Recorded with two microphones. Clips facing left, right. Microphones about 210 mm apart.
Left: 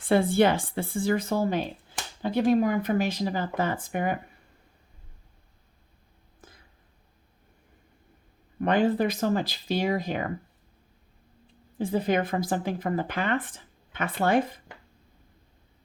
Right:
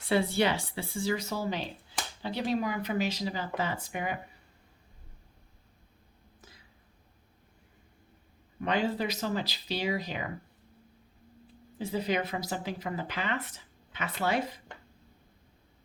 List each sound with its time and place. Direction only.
0.0 s speech: 50° left (ahead or behind)
6.4 s a sound: 50° left (ahead or behind)
8.6 s speech: 50° left (ahead or behind)
11.8 s speech: 50° left (ahead or behind)